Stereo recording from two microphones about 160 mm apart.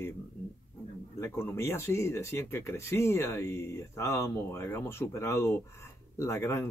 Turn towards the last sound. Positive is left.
turn(degrees=15)  # may be behind; listen again after turning